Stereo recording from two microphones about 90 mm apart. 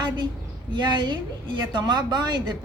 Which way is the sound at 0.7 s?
60° right (ahead or behind).